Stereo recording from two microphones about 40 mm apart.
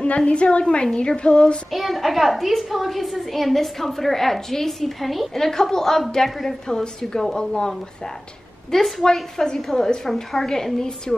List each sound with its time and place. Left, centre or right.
0.0 s a woman's voice: left
1.7 s a child's voice: centre
5.4 s a woman's voice: centre
9.0 s a woman's voice: centre